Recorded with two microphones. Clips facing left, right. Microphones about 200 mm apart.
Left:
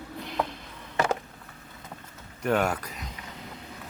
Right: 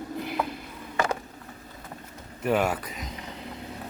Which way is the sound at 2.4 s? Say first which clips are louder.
Right 1 dB; 5° right (ahead or behind).